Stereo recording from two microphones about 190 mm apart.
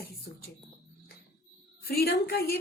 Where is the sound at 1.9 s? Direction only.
55° left (ahead or behind).